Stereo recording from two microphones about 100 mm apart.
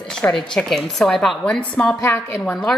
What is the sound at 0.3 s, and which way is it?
A woman's voice, 5° left (ahead or behind).